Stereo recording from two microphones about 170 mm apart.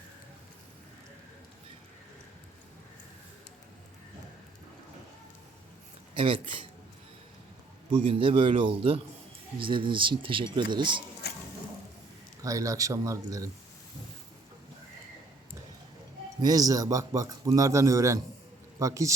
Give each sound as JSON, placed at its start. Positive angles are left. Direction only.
{"t": 6.1, "sound": "a man's voice", "side_deg": -30}
{"t": 7.9, "sound": "a man's voice", "side_deg": -35}
{"t": 11.2, "sound": "a sound", "side_deg": 70}
{"t": 12.4, "sound": "speech", "side_deg": -20}
{"t": 16.4, "sound": "speech", "side_deg": -20}